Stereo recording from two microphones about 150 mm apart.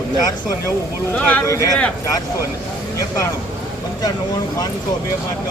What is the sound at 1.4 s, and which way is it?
Speech, 20° left (ahead or behind).